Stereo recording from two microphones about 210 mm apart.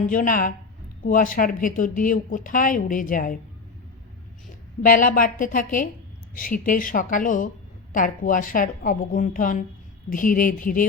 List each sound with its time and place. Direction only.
0.1 s a woman's voice: 40° left (ahead or behind)
4.8 s a woman's voice: 40° left (ahead or behind)